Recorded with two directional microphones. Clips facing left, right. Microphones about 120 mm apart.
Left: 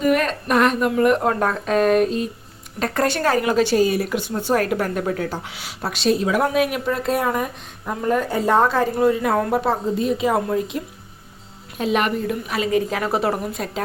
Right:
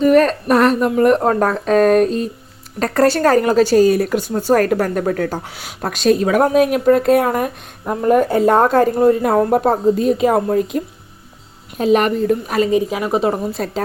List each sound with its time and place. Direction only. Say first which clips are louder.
0.0 s speech: right 7 dB; 35° right (ahead or behind)
12.7 s a woman's voice: right 4 dB; 15° right (ahead or behind)